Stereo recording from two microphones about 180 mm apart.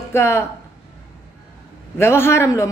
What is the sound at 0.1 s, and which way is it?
Speech, 15° left (ahead or behind).